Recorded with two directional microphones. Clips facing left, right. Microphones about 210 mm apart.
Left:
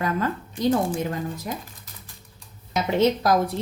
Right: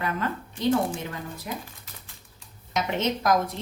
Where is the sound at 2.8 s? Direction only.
35° left (ahead or behind).